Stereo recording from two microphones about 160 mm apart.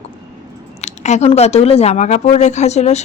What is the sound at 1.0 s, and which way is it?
Speech, 45° left (ahead or behind).